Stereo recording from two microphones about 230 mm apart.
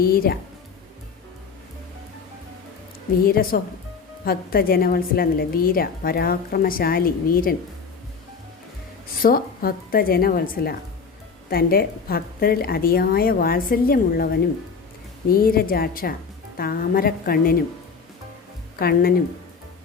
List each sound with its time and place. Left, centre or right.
0.0 s a woman's voice: left
3.2 s a woman's voice: left
9.2 s a woman's voice: left
18.8 s a woman's voice: left